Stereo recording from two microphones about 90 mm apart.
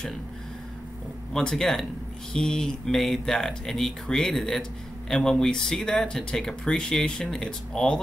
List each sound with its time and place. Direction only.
1.3 s speech: 10° left (ahead or behind)